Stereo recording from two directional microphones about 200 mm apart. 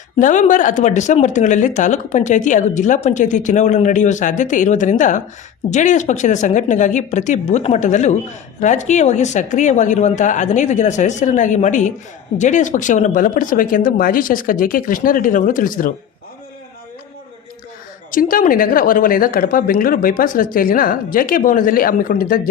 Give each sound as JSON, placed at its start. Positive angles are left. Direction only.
{"t": 0.2, "sound": "a woman's voice", "side_deg": 40}
{"t": 18.1, "sound": "a woman's voice", "side_deg": 45}